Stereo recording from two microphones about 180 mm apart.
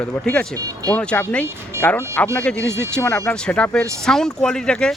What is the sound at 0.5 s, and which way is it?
Speech, 20° right (ahead or behind).